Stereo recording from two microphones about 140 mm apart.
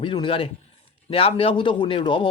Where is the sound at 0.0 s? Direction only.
35° left (ahead or behind).